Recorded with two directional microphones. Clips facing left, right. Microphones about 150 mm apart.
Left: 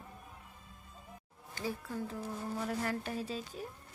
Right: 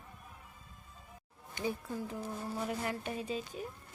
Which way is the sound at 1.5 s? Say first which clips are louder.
Right 1 dB; 20° right (ahead or behind).